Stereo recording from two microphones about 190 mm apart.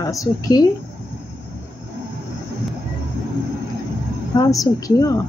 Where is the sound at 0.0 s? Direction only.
20° left (ahead or behind).